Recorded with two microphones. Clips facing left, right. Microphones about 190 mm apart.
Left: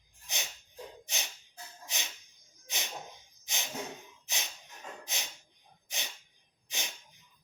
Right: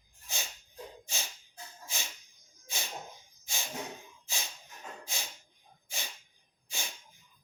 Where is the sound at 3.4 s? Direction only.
20° left (ahead or behind).